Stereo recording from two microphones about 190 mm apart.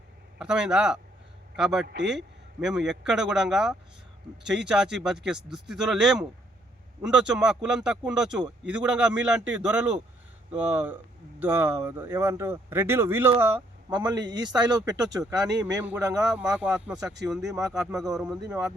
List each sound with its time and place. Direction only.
0.3 s speech: 5° right (ahead or behind)
1.9 s a man's voice: 65° right (ahead or behind)
2.1 s speech: centre (ahead or behind)
13.9 s speech: 20° right (ahead or behind)
16.3 s speech: 5° right (ahead or behind)
18.3 s speech: 20° right (ahead or behind)